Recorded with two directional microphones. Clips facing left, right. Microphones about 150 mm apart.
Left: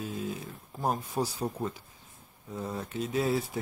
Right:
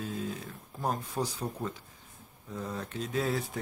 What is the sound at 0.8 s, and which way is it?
Speech, 10° left (ahead or behind).